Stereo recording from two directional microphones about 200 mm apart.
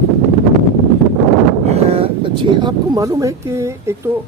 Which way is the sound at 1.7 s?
30° right (ahead or behind).